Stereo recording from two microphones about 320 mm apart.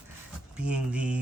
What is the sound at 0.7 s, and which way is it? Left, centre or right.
Speech, centre.